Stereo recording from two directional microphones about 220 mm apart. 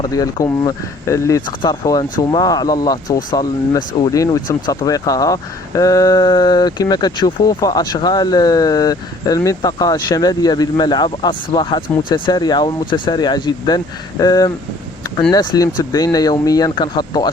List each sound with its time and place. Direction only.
0.0 s speech: 20° left (ahead or behind)